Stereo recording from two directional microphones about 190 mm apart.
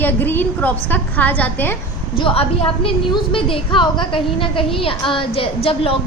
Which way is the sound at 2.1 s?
30° left (ahead or behind).